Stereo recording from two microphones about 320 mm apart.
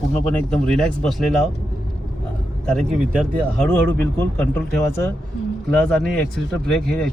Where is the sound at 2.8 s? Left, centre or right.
Centre.